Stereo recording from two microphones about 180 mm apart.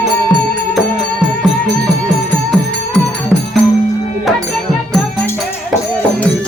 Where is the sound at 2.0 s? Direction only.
5° left (ahead or behind).